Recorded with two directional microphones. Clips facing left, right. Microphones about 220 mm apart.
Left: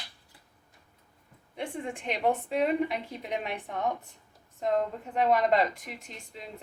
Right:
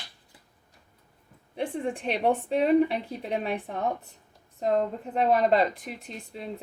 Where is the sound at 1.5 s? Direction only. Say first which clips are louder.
Right 5 dB; 35° right (ahead or behind).